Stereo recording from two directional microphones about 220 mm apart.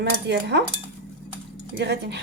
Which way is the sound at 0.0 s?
50° right (ahead or behind).